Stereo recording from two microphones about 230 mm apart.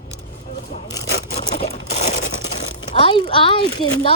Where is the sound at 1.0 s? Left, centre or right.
Left.